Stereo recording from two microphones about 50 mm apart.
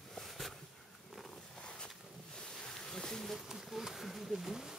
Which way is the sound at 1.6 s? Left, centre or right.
Centre.